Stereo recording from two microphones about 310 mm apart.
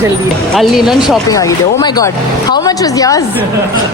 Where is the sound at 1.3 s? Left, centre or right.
Centre.